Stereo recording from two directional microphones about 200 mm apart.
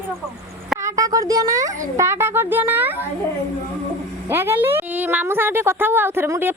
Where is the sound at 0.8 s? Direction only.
15° right (ahead or behind).